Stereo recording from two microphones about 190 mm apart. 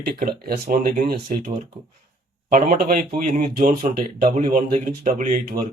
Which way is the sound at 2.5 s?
50° right (ahead or behind).